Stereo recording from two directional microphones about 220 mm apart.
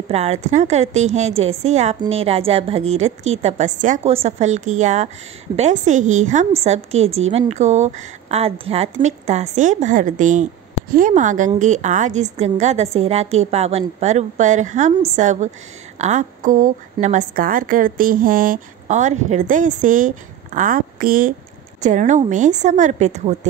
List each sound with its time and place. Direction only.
0.1 s a woman's voice: 30° right (ahead or behind)